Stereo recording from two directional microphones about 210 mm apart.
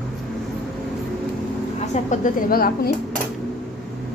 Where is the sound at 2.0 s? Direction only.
40° left (ahead or behind).